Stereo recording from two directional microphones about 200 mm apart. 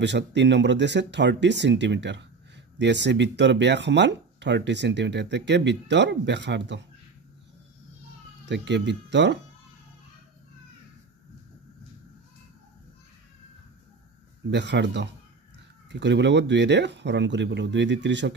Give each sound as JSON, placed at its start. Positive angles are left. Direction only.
{"t": 0.0, "sound": "speech", "side_deg": -60}
{"t": 8.5, "sound": "speech", "side_deg": -60}
{"t": 14.5, "sound": "speech", "side_deg": -60}